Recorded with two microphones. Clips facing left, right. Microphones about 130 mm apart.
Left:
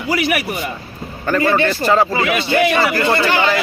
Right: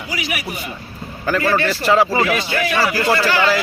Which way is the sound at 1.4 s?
20° left (ahead or behind).